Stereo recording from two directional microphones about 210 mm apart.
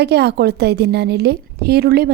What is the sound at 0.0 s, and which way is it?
A woman's voice, 50° right (ahead or behind).